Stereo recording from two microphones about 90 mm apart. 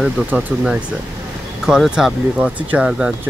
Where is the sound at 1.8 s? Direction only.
Centre (ahead or behind).